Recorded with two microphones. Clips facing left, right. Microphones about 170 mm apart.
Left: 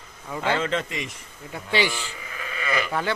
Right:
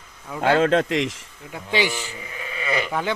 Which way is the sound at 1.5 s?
15° right (ahead or behind).